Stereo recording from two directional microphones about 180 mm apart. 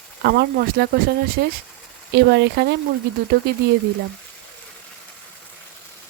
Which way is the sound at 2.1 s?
70° right (ahead or behind).